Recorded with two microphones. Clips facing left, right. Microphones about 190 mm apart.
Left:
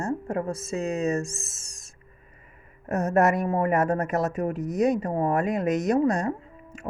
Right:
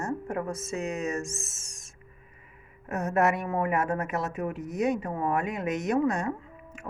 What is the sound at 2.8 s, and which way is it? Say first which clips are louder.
Speech: left 4 dB; 40° left (ahead or behind).